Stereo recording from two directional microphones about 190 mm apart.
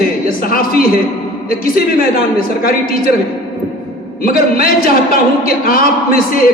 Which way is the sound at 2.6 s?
50° left (ahead or behind).